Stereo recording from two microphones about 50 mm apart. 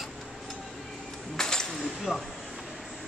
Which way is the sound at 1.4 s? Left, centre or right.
Centre.